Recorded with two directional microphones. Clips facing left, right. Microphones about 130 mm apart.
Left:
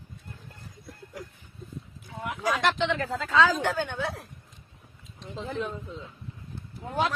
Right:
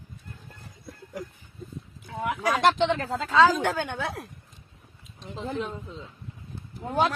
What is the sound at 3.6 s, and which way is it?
Speech, 55° right (ahead or behind).